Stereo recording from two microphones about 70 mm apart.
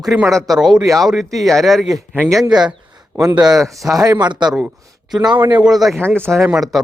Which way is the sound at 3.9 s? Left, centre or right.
Right.